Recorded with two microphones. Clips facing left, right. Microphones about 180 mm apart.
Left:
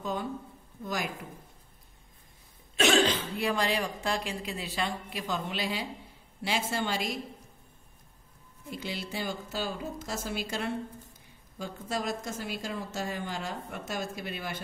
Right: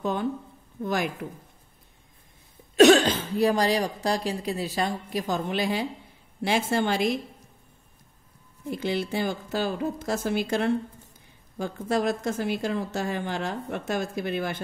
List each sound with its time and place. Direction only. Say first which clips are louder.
0.0 s a woman's voice: right 6 dB; 60° right (ahead or behind)
2.8 s speech: right 9 dB; 40° right (ahead or behind)
8.7 s a woman's voice: right 9 dB; 50° right (ahead or behind)